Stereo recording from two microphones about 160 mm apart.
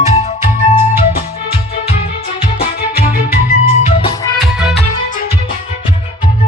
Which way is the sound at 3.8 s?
35° left (ahead or behind).